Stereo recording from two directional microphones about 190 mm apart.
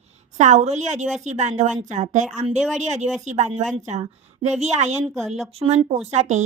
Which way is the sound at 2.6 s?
Centre (ahead or behind).